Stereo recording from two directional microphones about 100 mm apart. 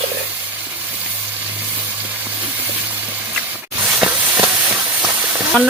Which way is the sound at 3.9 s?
15° right (ahead or behind).